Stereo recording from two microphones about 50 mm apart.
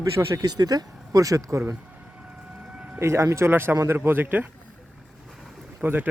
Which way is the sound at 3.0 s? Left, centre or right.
Right.